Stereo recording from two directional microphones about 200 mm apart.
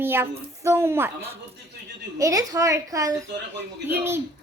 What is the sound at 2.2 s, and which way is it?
A woman's voice, 15° right (ahead or behind).